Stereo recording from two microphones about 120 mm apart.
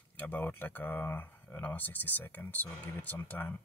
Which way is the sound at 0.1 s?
15° left (ahead or behind).